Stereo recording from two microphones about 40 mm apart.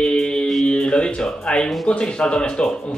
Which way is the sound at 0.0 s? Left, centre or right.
Left.